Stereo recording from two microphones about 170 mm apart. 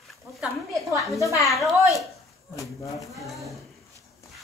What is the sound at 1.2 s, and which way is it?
Speech, 20° left (ahead or behind).